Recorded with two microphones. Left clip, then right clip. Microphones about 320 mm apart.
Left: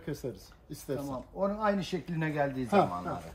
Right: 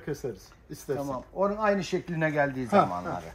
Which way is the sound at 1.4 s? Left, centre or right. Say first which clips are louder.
Right 4 dB; centre.